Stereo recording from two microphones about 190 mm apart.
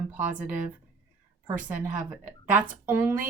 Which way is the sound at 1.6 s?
10° right (ahead or behind).